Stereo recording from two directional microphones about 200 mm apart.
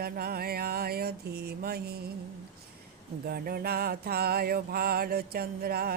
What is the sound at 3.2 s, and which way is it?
Speech, 50° right (ahead or behind).